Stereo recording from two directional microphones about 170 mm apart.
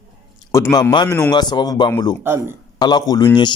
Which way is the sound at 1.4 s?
25° left (ahead or behind).